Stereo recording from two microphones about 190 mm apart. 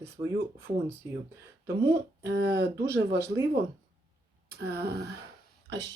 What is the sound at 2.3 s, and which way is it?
Speech, 60° right (ahead or behind).